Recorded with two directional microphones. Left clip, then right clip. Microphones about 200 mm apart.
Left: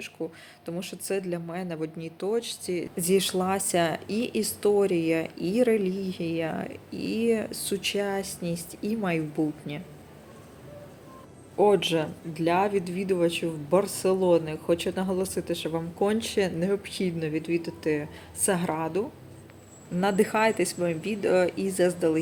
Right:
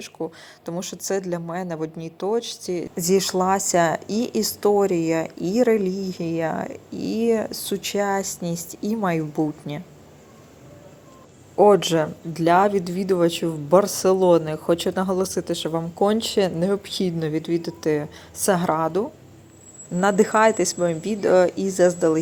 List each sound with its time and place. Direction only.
0.0 s a woman's voice: 20° right (ahead or behind)
11.5 s a woman's voice: 25° right (ahead or behind)
12.3 s a woman's voice: 40° right (ahead or behind); by 22.2 s 20° right (ahead or behind)